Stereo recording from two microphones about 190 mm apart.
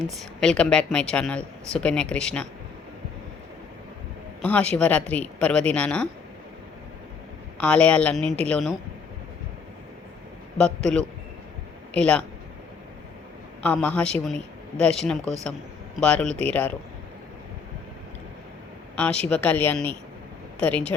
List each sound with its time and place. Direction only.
0.0 s a woman's voice: centre (ahead or behind)
4.4 s a woman's voice: 5° left (ahead or behind)
7.6 s a woman's voice: 5° left (ahead or behind)
10.6 s a woman's voice: 5° left (ahead or behind)
13.6 s a woman's voice: 5° left (ahead or behind)
19.2 s a woman's voice: 5° left (ahead or behind)